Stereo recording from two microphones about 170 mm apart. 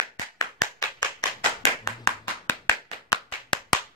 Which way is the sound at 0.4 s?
20° left (ahead or behind).